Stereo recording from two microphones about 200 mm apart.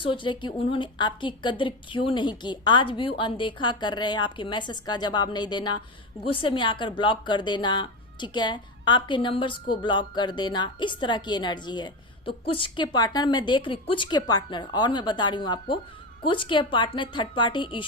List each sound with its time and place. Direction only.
0.0 s a woman's voice: 25° left (ahead or behind)